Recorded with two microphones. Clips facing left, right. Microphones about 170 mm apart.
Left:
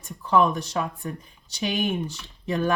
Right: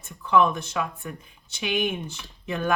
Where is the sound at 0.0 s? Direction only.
35° left (ahead or behind).